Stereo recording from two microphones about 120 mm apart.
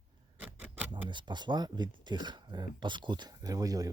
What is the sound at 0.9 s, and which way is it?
Speech, 40° right (ahead or behind).